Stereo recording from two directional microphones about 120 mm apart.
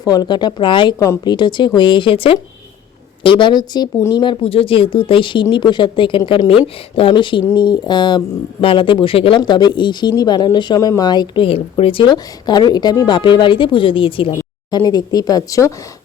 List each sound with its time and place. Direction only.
0.0 s speech: 35° left (ahead or behind)
0.9 s speech: 25° left (ahead or behind)
1.3 s speech: 40° left (ahead or behind)
9.4 s speech: 35° left (ahead or behind)
11.4 s speech: 55° left (ahead or behind)
14.7 s speech: 35° left (ahead or behind)